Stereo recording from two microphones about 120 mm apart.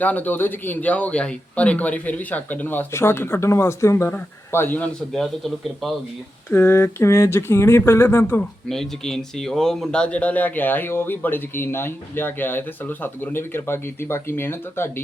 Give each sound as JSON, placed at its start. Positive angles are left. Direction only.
{"t": 0.0, "sound": "speech", "side_deg": 15}
{"t": 6.5, "sound": "speech", "side_deg": 20}
{"t": 8.7, "sound": "speech", "side_deg": 5}